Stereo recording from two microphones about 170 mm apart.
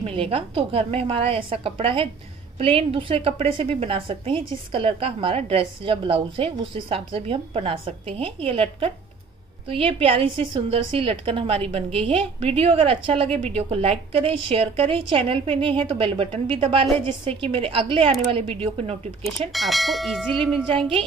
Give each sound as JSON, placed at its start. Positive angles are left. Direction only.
{"t": 0.0, "sound": "a woman's voice", "side_deg": -35}
{"t": 19.5, "sound": "speech", "side_deg": 0}
{"t": 20.7, "sound": "a woman's voice", "side_deg": -30}